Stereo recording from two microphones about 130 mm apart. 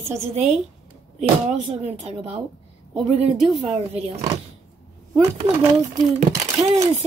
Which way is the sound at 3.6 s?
50° right (ahead or behind).